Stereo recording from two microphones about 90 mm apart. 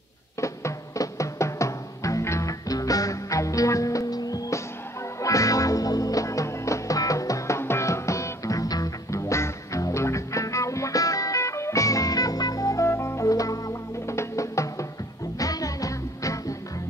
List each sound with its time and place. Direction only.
0.4 s music: 35° left (ahead or behind)